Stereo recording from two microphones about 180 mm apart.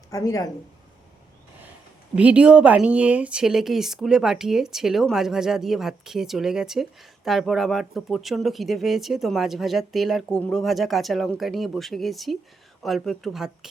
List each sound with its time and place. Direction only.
0.1 s speech: 20° left (ahead or behind)
2.1 s speech: 5° right (ahead or behind)